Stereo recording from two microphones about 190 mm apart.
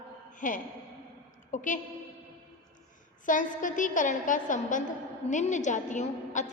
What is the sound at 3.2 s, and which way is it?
A woman's voice, 45° left (ahead or behind).